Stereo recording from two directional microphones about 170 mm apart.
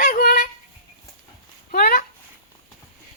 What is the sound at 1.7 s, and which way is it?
Speech, 60° left (ahead or behind).